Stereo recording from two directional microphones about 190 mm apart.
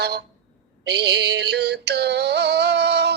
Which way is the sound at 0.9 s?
60° right (ahead or behind).